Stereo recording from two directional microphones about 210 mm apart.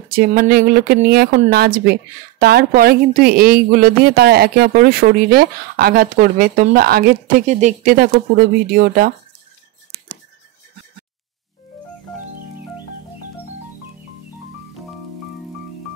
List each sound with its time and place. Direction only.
0.1 s speech: 45° right (ahead or behind)